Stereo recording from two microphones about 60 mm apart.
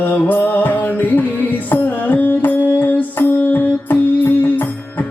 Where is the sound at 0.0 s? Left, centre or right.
Left.